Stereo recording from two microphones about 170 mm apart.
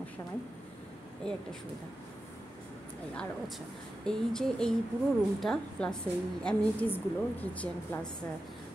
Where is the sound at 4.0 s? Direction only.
5° left (ahead or behind).